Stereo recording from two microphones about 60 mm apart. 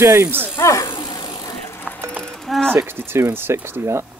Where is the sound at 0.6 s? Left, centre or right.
Left.